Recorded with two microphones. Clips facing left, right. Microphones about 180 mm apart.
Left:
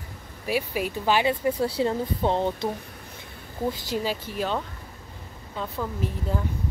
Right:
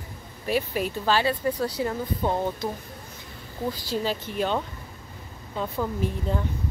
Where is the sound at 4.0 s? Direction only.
5° left (ahead or behind).